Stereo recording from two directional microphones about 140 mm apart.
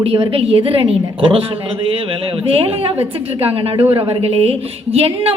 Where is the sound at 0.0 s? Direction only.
40° right (ahead or behind).